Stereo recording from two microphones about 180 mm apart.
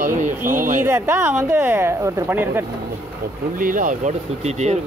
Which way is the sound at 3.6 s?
50° right (ahead or behind).